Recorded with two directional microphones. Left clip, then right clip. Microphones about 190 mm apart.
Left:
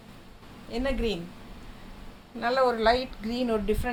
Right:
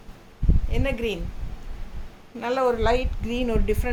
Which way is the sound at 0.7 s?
20° right (ahead or behind).